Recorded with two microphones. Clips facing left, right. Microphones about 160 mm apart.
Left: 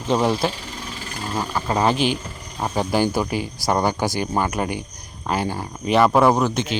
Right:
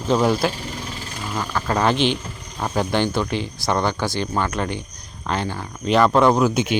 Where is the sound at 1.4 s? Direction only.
15° left (ahead or behind).